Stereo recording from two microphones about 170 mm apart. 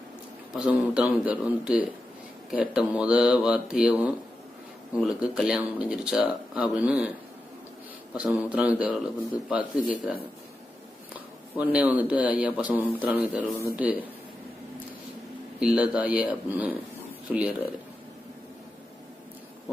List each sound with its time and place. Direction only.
0.5 s speech: 5° right (ahead or behind)
8.1 s speech: 5° right (ahead or behind)
11.5 s speech: 10° right (ahead or behind)
15.6 s speech: 5° right (ahead or behind)